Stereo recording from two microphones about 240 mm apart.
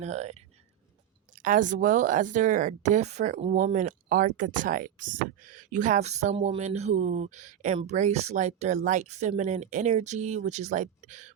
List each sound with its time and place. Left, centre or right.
0.0 s a woman's voice: right